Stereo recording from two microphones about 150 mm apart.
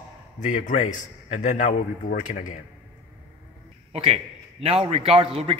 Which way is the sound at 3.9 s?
45° right (ahead or behind).